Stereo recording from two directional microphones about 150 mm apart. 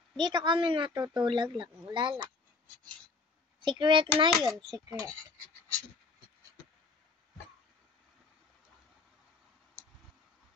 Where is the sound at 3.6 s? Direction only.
30° right (ahead or behind).